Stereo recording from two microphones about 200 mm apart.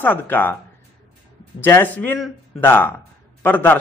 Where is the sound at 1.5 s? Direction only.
10° left (ahead or behind).